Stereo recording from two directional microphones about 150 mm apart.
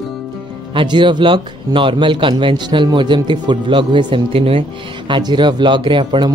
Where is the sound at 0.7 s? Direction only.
30° right (ahead or behind).